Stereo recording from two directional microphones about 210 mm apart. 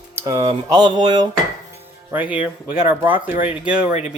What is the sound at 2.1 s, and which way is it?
Speech, 5° right (ahead or behind).